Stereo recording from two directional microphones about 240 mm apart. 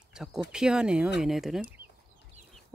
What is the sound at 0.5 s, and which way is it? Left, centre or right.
Speech, centre.